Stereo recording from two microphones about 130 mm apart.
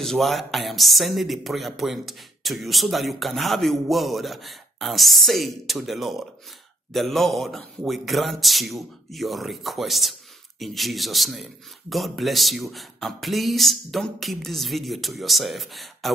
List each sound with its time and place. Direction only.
0.0 s speech: centre (ahead or behind)